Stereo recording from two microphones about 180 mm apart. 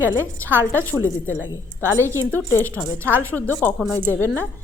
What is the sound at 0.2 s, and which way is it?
Speech, 10° left (ahead or behind).